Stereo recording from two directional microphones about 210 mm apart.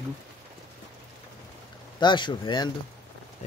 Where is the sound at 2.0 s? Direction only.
20° left (ahead or behind).